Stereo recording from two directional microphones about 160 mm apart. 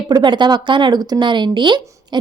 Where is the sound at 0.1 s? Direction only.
30° right (ahead or behind).